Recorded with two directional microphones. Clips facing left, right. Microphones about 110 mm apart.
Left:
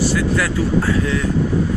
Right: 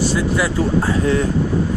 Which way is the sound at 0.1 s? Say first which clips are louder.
Even; 20° right (ahead or behind).